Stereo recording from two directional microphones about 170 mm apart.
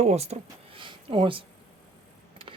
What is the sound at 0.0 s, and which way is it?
Speech, 40° right (ahead or behind).